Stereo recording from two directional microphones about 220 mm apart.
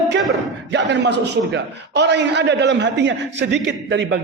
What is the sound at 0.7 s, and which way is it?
A man's voice, 50° right (ahead or behind).